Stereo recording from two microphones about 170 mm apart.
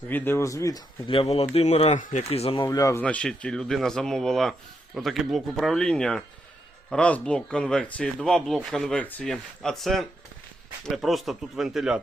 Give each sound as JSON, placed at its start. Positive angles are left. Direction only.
{"t": 0.1, "sound": "speech", "side_deg": 10}
{"t": 1.0, "sound": "speech", "side_deg": 35}
{"t": 2.6, "sound": "speech", "side_deg": 20}
{"t": 3.0, "sound": "speech", "side_deg": 5}